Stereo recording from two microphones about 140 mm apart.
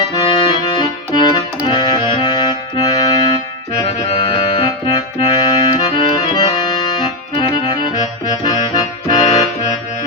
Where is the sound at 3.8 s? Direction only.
45° left (ahead or behind).